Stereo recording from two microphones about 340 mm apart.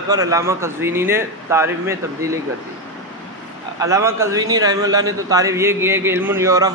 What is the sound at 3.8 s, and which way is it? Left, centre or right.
A man's voice, centre.